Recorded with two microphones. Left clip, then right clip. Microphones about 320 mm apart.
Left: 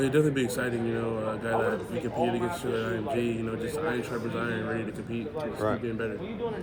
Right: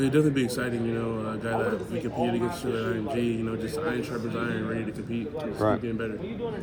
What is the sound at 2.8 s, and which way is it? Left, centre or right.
A man's voice, centre.